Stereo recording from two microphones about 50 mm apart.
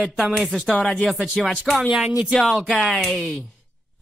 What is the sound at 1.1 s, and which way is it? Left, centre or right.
Speech, centre.